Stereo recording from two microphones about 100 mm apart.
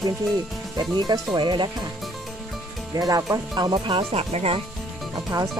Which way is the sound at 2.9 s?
40° right (ahead or behind).